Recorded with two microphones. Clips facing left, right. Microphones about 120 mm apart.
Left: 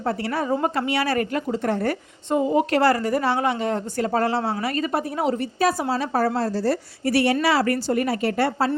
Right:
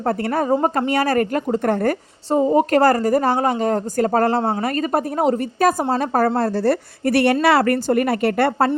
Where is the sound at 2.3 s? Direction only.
35° right (ahead or behind).